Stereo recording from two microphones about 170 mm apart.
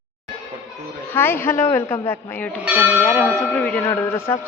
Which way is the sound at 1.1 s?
15° left (ahead or behind).